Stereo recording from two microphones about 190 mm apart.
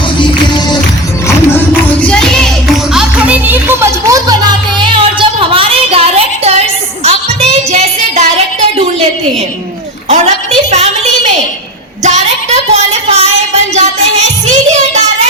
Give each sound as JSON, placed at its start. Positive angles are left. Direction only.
{"t": 0.2, "sound": "music", "side_deg": 25}
{"t": 2.0, "sound": "music", "side_deg": 5}
{"t": 10.1, "sound": "a sound", "side_deg": -35}
{"t": 12.0, "sound": "music", "side_deg": -35}
{"t": 14.9, "sound": "child singing", "side_deg": -35}